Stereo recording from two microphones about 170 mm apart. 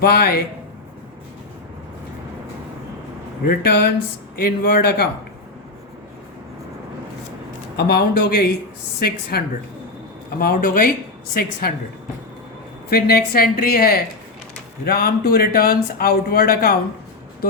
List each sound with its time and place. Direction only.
0.0 s a man's voice: 65° left (ahead or behind)
3.4 s a man's voice: 65° left (ahead or behind)
7.8 s speech: 70° left (ahead or behind)
10.4 s a man's voice: 55° left (ahead or behind)
12.9 s a man's voice: 65° left (ahead or behind)